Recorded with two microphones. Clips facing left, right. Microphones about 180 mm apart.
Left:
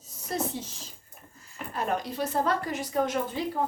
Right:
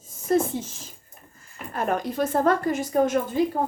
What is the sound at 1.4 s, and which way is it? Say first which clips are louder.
Speech: right 3 dB; 50° right (ahead or behind).